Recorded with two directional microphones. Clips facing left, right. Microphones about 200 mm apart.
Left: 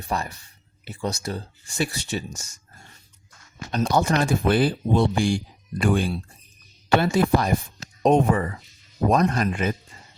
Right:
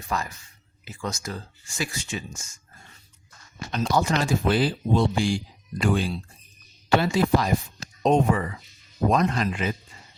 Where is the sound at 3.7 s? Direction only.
50° left (ahead or behind).